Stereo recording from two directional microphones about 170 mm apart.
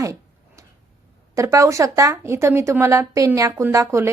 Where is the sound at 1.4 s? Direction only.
20° right (ahead or behind).